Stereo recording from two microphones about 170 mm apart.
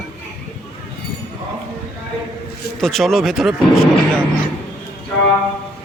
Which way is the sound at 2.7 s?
Centre (ahead or behind).